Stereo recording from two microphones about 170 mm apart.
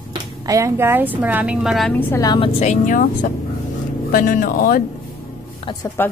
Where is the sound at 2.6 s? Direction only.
45° left (ahead or behind).